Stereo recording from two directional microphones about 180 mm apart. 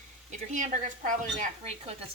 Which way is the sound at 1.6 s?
35° right (ahead or behind).